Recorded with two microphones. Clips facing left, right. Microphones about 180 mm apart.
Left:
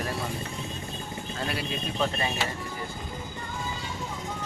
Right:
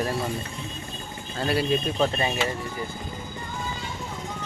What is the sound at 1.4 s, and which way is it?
Speech, 35° right (ahead or behind).